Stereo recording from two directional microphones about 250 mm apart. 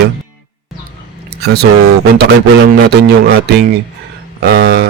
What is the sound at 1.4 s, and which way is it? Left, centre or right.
Speech, right.